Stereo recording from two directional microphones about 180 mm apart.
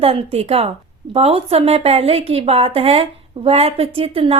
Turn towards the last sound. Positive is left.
turn(degrees=-30)  # may be behind; listen again after turning